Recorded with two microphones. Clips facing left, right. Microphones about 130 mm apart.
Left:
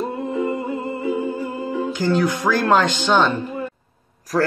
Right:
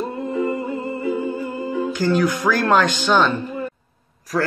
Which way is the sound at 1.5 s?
Centre (ahead or behind).